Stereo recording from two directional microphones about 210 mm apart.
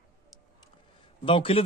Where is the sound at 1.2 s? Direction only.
25° left (ahead or behind).